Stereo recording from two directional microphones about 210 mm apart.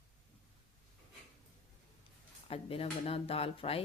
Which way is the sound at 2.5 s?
25° left (ahead or behind).